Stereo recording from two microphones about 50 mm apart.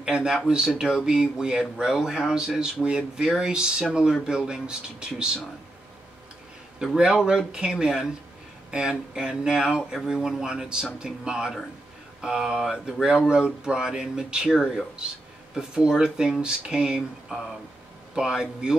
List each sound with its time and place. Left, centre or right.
0.0 s speech: centre
6.8 s speech: centre
15.5 s speech: centre
18.1 s speech: centre